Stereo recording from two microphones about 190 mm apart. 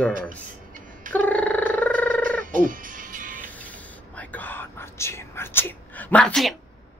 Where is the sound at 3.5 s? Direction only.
5° left (ahead or behind).